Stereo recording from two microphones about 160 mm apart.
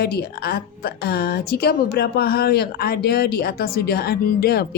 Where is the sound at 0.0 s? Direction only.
75° left (ahead or behind).